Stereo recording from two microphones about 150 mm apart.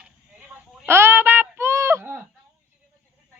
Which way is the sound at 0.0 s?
10° right (ahead or behind).